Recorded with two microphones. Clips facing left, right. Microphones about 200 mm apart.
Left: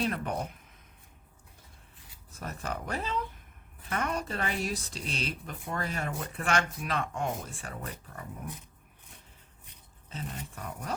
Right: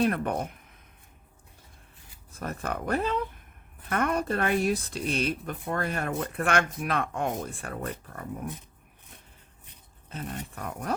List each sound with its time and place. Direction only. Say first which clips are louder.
0.0 s speech: right 5 dB; 55° right (ahead or behind)
2.4 s speech: right 4 dB; 55° right (ahead or behind)
10.1 s speech: right 3 dB; 55° right (ahead or behind)